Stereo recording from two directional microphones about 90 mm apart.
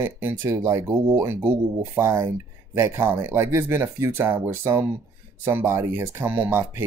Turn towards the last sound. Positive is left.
turn(degrees=-25)  # may be behind; listen again after turning